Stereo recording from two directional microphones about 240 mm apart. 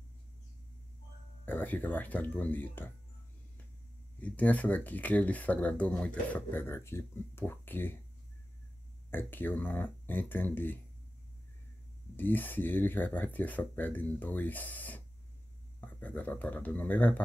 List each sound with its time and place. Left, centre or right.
1.4 s speech: centre
4.2 s speech: centre
9.1 s speech: centre
12.2 s speech: centre